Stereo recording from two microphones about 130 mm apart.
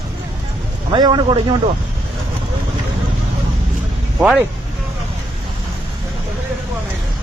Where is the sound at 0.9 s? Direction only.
35° right (ahead or behind).